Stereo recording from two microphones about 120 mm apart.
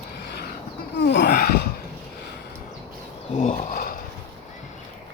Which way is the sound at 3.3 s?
90° left.